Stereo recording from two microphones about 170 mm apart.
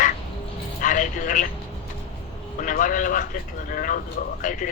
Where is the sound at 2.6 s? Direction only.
50° left (ahead or behind).